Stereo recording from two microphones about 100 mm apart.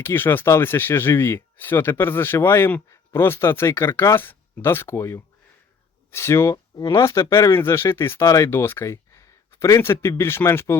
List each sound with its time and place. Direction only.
0.0 s speech: 20° left (ahead or behind)